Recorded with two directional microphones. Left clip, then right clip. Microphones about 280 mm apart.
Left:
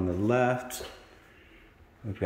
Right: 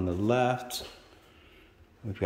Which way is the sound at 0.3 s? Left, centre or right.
Centre.